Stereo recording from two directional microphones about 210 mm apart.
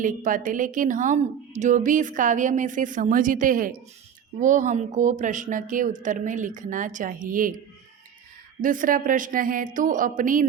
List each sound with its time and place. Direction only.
0.0 s a woman's voice: 40° right (ahead or behind)
8.6 s a woman's voice: 40° right (ahead or behind)